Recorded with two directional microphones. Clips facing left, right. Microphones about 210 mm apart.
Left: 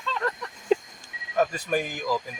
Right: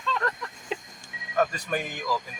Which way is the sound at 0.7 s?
45° left (ahead or behind).